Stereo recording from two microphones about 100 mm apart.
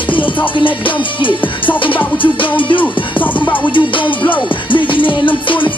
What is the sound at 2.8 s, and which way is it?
Music, 15° left (ahead or behind).